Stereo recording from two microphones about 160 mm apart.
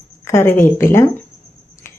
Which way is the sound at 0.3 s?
15° left (ahead or behind).